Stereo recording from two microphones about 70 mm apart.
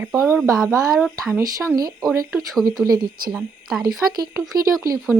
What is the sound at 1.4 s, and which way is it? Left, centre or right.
Speech, right.